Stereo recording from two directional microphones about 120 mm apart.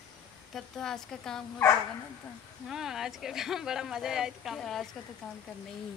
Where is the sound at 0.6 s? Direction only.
5° left (ahead or behind).